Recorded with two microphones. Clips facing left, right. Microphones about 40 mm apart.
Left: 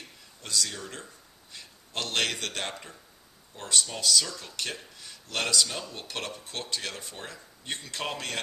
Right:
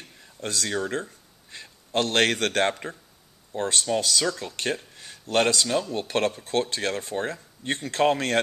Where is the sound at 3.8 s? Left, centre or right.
Right.